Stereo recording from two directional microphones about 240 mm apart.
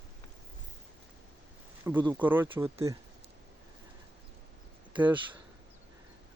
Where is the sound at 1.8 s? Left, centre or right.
Centre.